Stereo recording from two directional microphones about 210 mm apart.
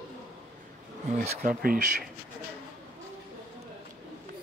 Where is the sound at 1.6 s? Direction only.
45° right (ahead or behind).